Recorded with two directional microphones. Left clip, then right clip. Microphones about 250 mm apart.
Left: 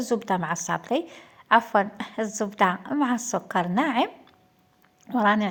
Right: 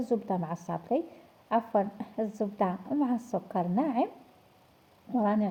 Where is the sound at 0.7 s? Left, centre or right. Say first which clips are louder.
Left 3 dB; left.